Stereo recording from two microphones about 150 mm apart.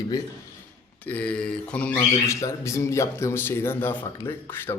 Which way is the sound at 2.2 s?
20° left (ahead or behind).